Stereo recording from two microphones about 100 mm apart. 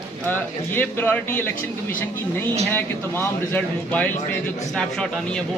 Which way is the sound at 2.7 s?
20° left (ahead or behind).